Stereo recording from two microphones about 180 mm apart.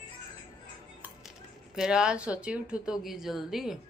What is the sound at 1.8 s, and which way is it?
Speech, 5° right (ahead or behind).